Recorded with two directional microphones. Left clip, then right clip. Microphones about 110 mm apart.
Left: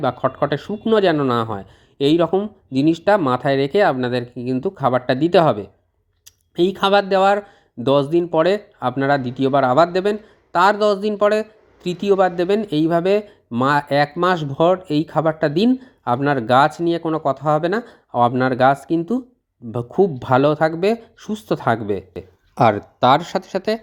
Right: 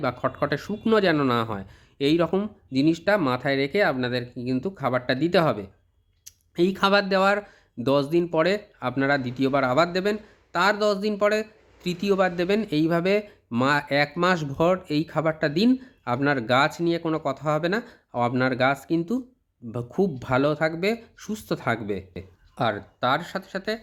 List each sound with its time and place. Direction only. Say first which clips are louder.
0.0 s speech: left 6 dB; 10° left (ahead or behind)
22.5 s speech: left 10 dB; 45° left (ahead or behind)